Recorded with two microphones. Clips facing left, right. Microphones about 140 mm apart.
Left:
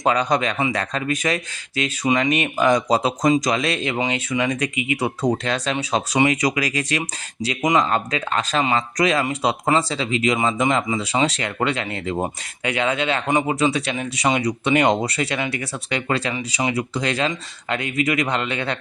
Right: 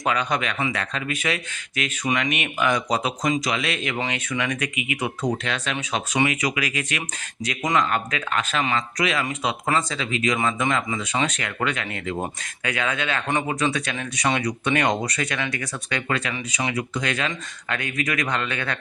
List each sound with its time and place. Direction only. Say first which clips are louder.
0.0 s speech: left 5 dB; 35° left (ahead or behind)
3.9 s speech: left 4 dB; 25° left (ahead or behind)
7.4 s speech: left 4 dB; 20° left (ahead or behind)
7.8 s speech: left 3 dB; 30° left (ahead or behind)